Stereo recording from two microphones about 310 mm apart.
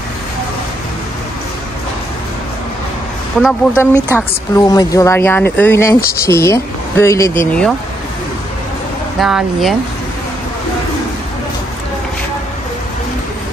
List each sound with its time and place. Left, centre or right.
3.3 s speech: centre
4.2 s speech: centre
9.2 s speech: centre